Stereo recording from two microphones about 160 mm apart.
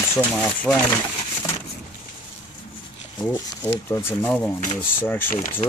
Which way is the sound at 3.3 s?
15° left (ahead or behind).